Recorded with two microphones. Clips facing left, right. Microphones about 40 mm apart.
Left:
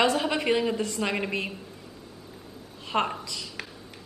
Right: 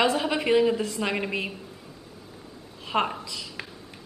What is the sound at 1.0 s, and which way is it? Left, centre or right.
Speech, centre.